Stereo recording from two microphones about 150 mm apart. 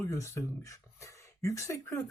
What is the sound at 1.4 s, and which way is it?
Speech, 20° left (ahead or behind).